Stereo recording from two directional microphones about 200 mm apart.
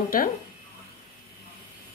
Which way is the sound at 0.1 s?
45° left (ahead or behind).